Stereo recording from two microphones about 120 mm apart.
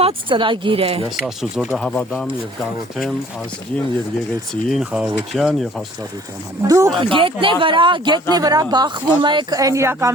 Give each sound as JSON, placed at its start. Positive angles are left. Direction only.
{"t": 0.0, "sound": "speech", "side_deg": -45}
{"t": 1.2, "sound": "speech", "side_deg": 0}
{"t": 4.7, "sound": "speech", "side_deg": -5}
{"t": 6.7, "sound": "speech", "side_deg": -25}
{"t": 6.9, "sound": "speech", "side_deg": -45}
{"t": 9.6, "sound": "speech", "side_deg": -25}